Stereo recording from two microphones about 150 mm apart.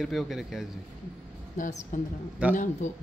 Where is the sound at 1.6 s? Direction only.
50° left (ahead or behind).